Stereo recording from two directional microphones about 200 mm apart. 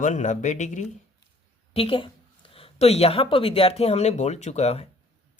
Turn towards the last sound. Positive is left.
turn(degrees=35)  # may be behind; listen again after turning